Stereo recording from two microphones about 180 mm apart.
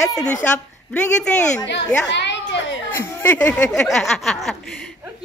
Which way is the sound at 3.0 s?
10° left (ahead or behind).